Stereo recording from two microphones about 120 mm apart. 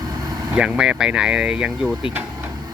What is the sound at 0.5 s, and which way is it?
Speech, 10° right (ahead or behind).